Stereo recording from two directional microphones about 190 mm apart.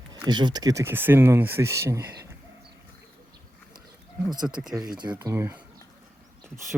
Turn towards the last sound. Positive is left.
turn(degrees=-10)  # may be behind; listen again after turning